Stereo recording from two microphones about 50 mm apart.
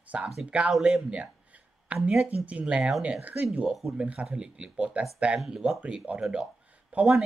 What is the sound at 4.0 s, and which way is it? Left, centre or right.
Speech, right.